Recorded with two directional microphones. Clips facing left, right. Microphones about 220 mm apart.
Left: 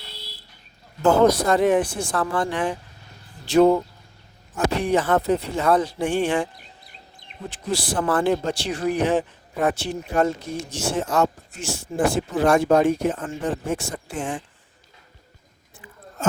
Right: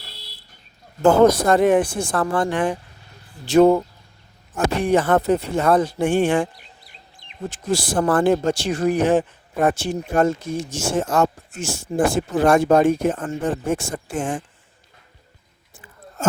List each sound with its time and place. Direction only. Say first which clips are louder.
1.0 s speech: right 3 dB; 50° right (ahead or behind)
7.5 s speech: right 3 dB; 45° right (ahead or behind)